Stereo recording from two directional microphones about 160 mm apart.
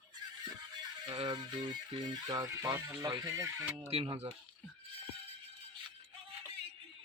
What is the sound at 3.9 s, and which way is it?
Speech, 35° right (ahead or behind).